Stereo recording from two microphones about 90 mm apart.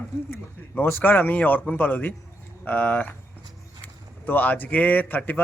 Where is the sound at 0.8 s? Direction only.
20° left (ahead or behind).